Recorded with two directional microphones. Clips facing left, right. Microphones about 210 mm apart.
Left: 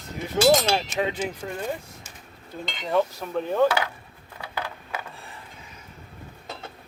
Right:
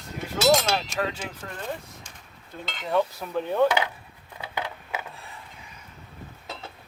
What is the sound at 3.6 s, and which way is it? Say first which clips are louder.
Speech: even; 20° right (ahead or behind).